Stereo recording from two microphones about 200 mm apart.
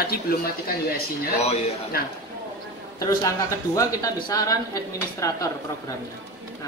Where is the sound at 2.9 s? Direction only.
15° left (ahead or behind).